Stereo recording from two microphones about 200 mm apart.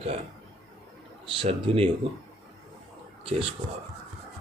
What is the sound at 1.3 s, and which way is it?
Speech, 25° right (ahead or behind).